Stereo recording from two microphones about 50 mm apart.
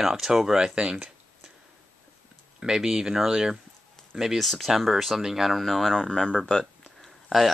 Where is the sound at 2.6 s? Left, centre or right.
Centre.